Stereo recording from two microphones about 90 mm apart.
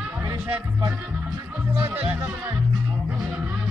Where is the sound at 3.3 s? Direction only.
10° right (ahead or behind).